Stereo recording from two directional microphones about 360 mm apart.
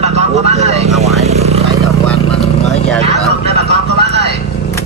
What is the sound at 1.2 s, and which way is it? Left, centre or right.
Vehicle, centre.